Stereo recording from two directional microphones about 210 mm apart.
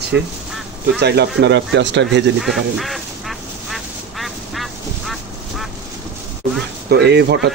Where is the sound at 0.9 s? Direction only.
50° right (ahead or behind).